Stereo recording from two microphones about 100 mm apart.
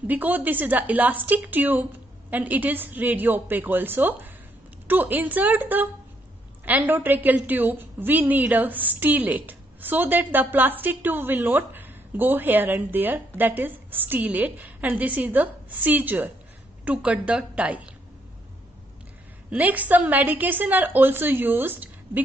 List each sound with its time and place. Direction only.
0.0 s a woman's voice: 15° right (ahead or behind)
19.5 s a woman's voice: 15° right (ahead or behind)